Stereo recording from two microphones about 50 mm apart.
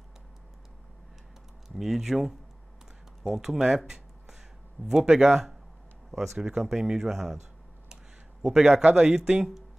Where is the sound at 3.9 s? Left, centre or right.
Centre.